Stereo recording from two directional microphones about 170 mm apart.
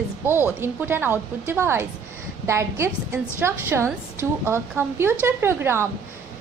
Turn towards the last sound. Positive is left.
turn(degrees=-15)  # may be behind; listen again after turning